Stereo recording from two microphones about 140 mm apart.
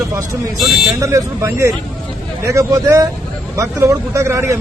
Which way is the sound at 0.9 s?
20° right (ahead or behind).